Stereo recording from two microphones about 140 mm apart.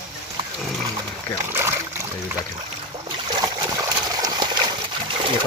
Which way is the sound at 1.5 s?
15° right (ahead or behind).